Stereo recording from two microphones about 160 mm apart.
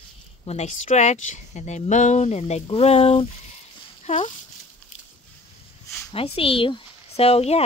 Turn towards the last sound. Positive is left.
turn(degrees=40)  # may be behind; listen again after turning